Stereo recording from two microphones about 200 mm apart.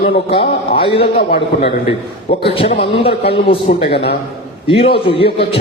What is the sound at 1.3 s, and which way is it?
Speech, 50° left (ahead or behind).